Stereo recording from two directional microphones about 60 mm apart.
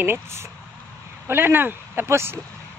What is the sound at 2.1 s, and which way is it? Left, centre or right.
Speech, right.